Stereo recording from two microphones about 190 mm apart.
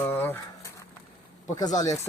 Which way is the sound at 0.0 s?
10° left (ahead or behind).